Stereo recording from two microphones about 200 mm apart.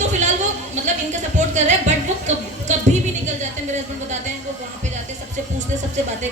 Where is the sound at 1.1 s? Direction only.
35° right (ahead or behind).